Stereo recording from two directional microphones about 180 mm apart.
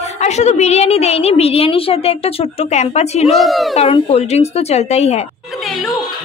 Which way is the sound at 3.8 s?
35° left (ahead or behind).